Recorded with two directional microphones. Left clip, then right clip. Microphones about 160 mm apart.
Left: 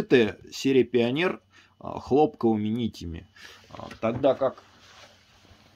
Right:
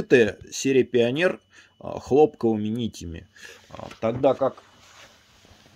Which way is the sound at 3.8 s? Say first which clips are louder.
Right 2 dB; 90° right.